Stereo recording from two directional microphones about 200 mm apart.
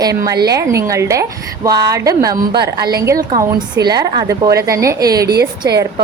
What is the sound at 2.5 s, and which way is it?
Speech, 50° right (ahead or behind).